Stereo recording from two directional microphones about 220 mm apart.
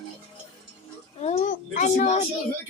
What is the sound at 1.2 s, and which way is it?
A woman's voice, 35° left (ahead or behind).